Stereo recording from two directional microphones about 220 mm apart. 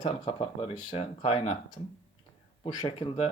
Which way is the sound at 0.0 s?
25° left (ahead or behind).